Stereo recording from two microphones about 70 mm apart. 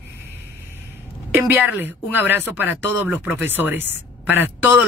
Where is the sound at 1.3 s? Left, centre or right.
Right.